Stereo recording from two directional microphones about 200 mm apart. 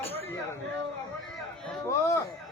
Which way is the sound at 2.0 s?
15° left (ahead or behind).